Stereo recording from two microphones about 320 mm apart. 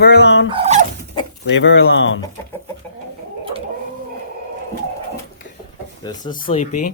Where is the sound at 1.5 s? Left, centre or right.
Left.